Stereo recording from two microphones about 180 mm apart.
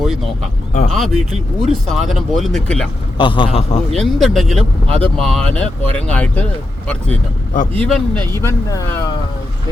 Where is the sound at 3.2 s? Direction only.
30° left (ahead or behind).